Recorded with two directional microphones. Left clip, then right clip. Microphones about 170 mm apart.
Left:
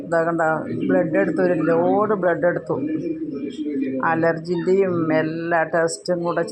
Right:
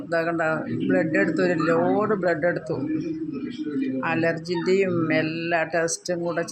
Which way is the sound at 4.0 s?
15° left (ahead or behind).